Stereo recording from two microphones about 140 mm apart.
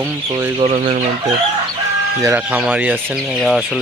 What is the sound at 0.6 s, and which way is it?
Speech, 55° right (ahead or behind).